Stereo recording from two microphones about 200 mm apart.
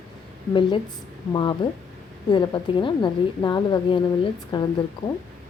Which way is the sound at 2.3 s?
25° left (ahead or behind).